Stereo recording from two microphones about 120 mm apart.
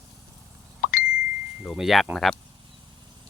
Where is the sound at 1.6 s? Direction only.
Centre (ahead or behind).